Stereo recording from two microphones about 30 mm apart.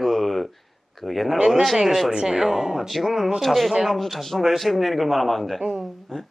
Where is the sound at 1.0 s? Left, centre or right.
Centre.